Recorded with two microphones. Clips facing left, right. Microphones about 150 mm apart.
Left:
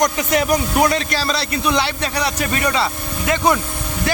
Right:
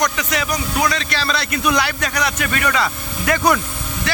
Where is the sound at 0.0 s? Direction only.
45° left (ahead or behind); by 3.6 s 20° left (ahead or behind).